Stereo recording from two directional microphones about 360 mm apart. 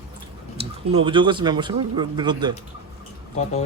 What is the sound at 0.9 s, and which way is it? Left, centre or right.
Speech, centre.